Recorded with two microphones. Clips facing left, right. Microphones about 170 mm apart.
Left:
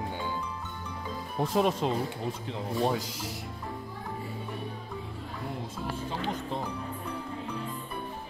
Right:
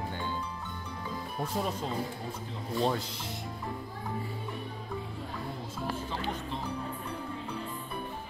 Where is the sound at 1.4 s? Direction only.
90° left.